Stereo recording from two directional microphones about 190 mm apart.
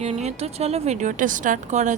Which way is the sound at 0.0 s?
35° right (ahead or behind).